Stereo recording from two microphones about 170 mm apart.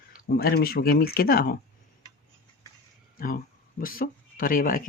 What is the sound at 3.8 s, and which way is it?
Speech, 55° left (ahead or behind).